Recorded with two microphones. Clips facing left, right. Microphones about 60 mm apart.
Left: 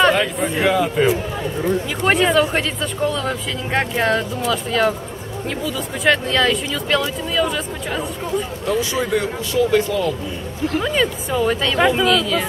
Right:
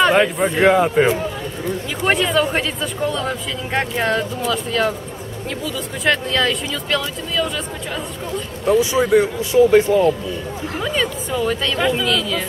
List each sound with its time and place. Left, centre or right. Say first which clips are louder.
0.1 s speech: right 3 dB; centre
2.0 s speech: left 1 dB; centre
8.6 s speech: right 7 dB; centre
10.8 s speech: even; centre